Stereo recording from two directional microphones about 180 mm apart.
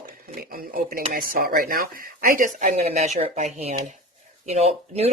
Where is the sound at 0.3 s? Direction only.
50° right (ahead or behind).